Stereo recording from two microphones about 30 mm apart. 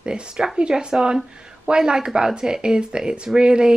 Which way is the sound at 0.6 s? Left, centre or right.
Right.